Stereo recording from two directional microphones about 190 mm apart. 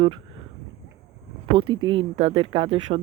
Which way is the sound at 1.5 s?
25° right (ahead or behind).